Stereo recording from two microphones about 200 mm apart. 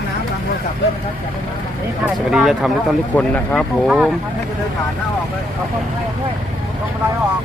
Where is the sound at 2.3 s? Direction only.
Centre (ahead or behind).